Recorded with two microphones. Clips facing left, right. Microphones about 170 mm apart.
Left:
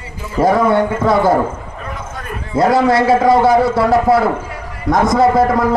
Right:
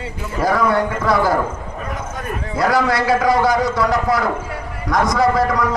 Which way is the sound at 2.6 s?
25° left (ahead or behind).